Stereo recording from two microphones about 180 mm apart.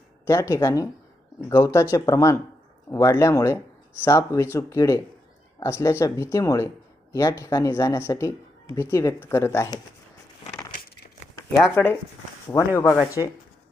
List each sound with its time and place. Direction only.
0.3 s speech: 15° left (ahead or behind)
11.7 s speech: 10° left (ahead or behind)